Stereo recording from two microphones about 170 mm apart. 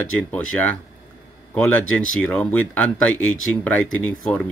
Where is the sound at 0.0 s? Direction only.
10° left (ahead or behind).